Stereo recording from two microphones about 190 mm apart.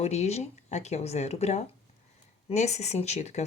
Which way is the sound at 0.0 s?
35° left (ahead or behind).